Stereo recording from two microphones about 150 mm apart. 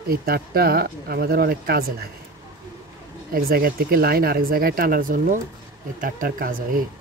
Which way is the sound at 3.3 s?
75° right (ahead or behind).